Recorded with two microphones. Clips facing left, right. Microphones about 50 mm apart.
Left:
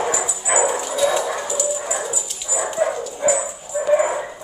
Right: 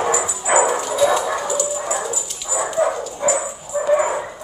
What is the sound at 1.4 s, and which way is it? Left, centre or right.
Dog, centre.